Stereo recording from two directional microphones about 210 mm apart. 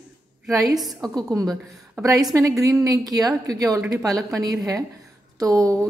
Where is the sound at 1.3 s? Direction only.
15° right (ahead or behind).